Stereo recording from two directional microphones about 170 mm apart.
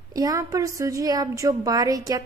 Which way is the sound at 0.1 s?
20° right (ahead or behind).